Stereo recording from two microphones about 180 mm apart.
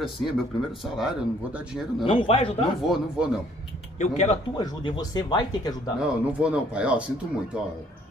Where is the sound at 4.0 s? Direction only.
40° left (ahead or behind).